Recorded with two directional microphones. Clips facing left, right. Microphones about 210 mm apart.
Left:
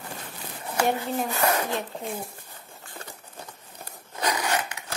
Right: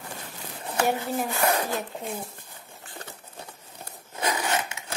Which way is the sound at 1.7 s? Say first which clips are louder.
Left 1 dB; centre (ahead or behind).